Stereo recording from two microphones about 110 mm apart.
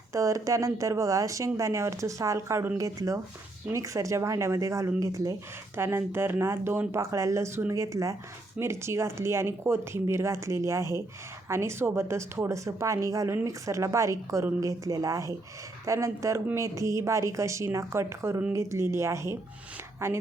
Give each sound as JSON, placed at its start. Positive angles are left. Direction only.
{"t": 0.1, "sound": "speech", "side_deg": -30}